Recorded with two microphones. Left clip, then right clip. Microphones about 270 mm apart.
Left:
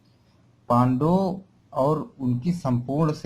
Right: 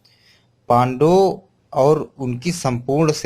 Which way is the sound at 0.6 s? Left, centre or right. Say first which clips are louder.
Right 7 dB; right.